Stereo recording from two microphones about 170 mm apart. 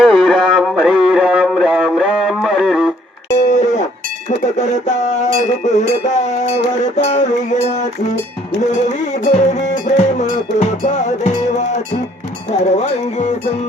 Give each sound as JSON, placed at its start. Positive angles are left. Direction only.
{"t": 0.0, "sound": "a sound", "side_deg": 0}
{"t": 3.4, "sound": "music", "side_deg": 45}
{"t": 4.3, "sound": "cowbell", "side_deg": 45}
{"t": 9.1, "sound": "cowbell", "side_deg": 45}